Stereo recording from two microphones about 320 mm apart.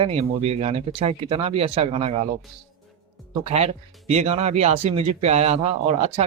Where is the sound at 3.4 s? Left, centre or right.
Centre.